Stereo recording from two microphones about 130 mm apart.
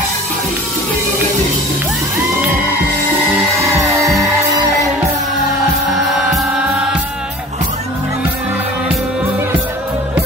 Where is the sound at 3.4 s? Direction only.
25° right (ahead or behind).